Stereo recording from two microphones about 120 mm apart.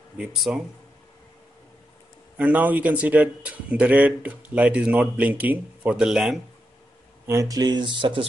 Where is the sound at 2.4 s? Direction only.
15° right (ahead or behind).